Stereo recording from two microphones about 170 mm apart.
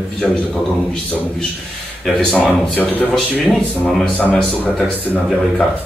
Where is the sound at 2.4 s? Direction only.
10° left (ahead or behind).